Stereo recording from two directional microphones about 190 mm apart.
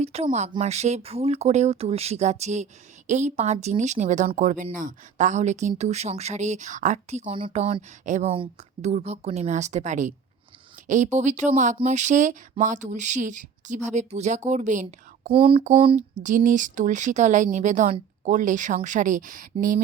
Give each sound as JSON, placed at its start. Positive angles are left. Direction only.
{"t": 0.0, "sound": "speech", "side_deg": -35}
{"t": 15.3, "sound": "speech", "side_deg": -30}
{"t": 16.2, "sound": "speech", "side_deg": -45}